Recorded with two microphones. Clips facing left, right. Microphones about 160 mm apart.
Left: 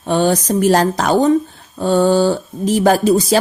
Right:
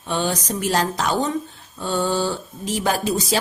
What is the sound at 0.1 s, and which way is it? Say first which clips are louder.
A woman's voice: left 9 dB; 50° left (ahead or behind).